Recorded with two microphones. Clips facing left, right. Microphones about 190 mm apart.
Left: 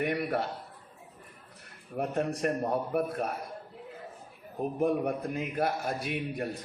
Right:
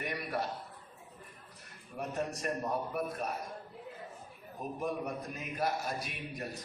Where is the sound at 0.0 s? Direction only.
60° left (ahead or behind).